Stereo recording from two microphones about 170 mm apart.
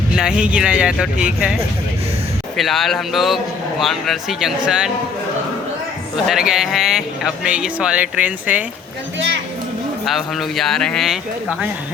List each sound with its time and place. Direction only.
0.2 s speech: 5° right (ahead or behind)
2.6 s speech: centre (ahead or behind)
6.2 s speech: 5° right (ahead or behind)
9.1 s speech: 90° right
10.1 s speech: centre (ahead or behind)